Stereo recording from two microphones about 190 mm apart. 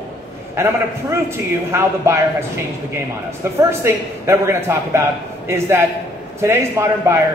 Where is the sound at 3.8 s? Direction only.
15° right (ahead or behind).